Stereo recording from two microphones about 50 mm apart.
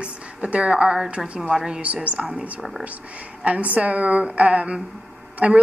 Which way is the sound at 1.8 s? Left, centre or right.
Right.